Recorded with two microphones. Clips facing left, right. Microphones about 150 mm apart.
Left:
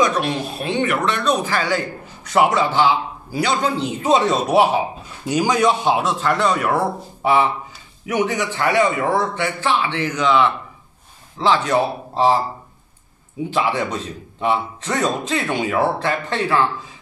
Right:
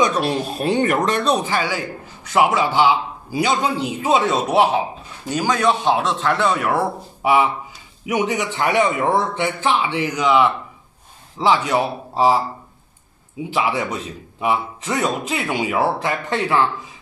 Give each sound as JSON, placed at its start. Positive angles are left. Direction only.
{"t": 0.0, "sound": "speech", "side_deg": -35}
{"t": 1.4, "sound": "speech", "side_deg": -15}
{"t": 2.2, "sound": "speech", "side_deg": -5}
{"t": 4.0, "sound": "a man's voice", "side_deg": 0}
{"t": 5.3, "sound": "speech", "side_deg": 15}
{"t": 8.0, "sound": "speech", "side_deg": -15}
{"t": 13.5, "sound": "speech", "side_deg": -10}